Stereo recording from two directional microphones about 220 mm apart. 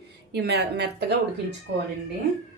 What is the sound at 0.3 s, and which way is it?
Speech, 50° right (ahead or behind).